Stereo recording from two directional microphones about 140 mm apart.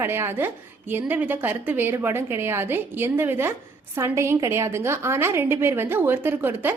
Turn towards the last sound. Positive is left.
turn(degrees=-15)  # may be behind; listen again after turning